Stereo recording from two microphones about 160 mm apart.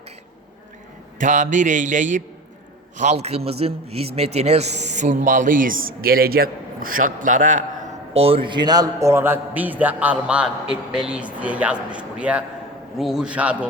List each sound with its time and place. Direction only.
1.2 s a man's voice: 50° right (ahead or behind)
8.1 s a man's voice: 35° right (ahead or behind); by 13.7 s 10° right (ahead or behind)